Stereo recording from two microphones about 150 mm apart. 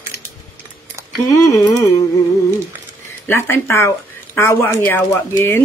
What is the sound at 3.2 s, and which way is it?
Speech, 15° left (ahead or behind).